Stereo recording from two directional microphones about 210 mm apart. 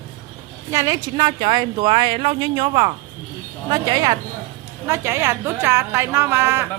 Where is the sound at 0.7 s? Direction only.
15° right (ahead or behind).